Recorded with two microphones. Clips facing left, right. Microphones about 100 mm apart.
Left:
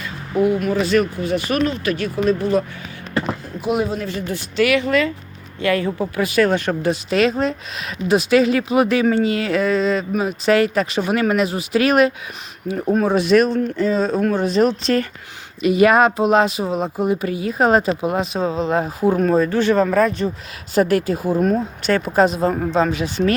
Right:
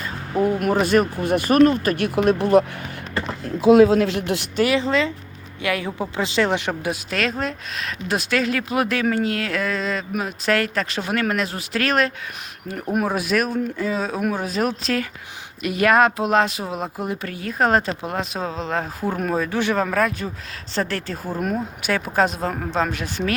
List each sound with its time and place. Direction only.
0.4 s speech: 55° right (ahead or behind)
2.0 s speech: 60° right (ahead or behind)
3.8 s speech: 90° right
4.6 s speech: 30° right (ahead or behind)
5.5 s speech: 15° right (ahead or behind)
6.8 s speech: centre (ahead or behind)
12.9 s speech: 5° right (ahead or behind)
19.5 s speech: 15° right (ahead or behind)
19.7 s speech: centre (ahead or behind)
20.7 s speech: 10° left (ahead or behind)